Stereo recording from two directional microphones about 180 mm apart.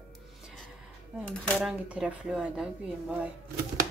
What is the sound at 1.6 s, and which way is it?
Speech, 5° right (ahead or behind).